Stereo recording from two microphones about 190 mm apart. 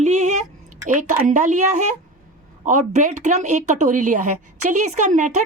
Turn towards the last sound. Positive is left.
turn(degrees=-40)  # may be behind; listen again after turning